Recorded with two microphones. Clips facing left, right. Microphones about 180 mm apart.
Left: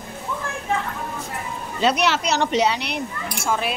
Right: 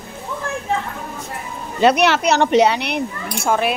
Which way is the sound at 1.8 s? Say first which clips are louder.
Right 6 dB; 60° right (ahead or behind).